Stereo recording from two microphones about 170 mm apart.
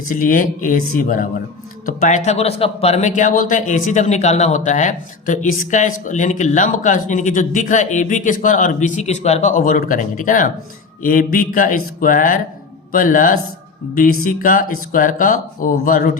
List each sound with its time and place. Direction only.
0.1 s speech: 55° left (ahead or behind)